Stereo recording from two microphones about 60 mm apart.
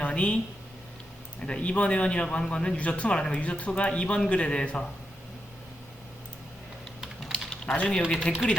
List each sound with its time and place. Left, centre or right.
0.0 s a sound: centre
1.4 s a man's voice: centre
7.3 s typing: centre
8.3 s a man's voice: centre